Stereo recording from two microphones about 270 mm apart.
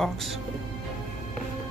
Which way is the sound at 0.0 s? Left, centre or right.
Centre.